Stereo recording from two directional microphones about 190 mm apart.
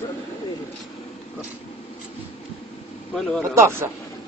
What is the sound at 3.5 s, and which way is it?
Speech, 15° right (ahead or behind).